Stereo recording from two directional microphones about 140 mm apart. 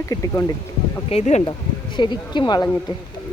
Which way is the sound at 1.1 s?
55° left (ahead or behind).